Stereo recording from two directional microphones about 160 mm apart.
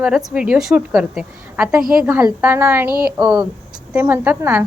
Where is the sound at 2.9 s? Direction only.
70° right (ahead or behind).